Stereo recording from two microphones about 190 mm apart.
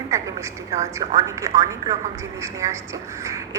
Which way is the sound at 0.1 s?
15° right (ahead or behind).